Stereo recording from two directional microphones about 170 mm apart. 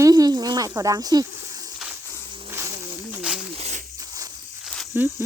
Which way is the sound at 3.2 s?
5° right (ahead or behind).